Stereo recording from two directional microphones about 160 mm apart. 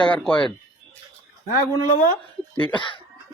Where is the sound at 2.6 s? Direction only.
30° left (ahead or behind).